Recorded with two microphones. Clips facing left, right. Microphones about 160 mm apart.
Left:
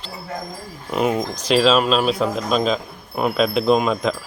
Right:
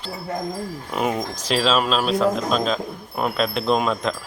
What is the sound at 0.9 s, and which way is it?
Speech, 5° left (ahead or behind).